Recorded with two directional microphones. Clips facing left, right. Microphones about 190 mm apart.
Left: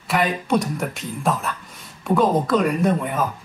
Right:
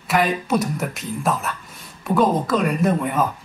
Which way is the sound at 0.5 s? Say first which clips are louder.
Even; 5° right (ahead or behind).